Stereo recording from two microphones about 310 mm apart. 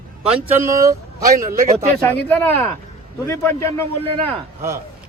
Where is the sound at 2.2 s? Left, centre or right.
Centre.